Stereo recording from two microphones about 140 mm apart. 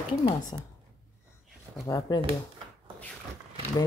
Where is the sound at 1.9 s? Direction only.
20° left (ahead or behind).